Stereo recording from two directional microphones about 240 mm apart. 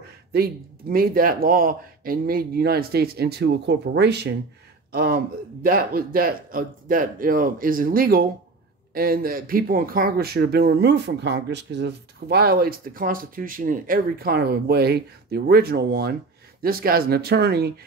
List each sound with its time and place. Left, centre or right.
0.3 s speech: right